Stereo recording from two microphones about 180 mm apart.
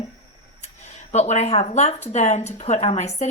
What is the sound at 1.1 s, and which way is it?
Speech, 40° left (ahead or behind).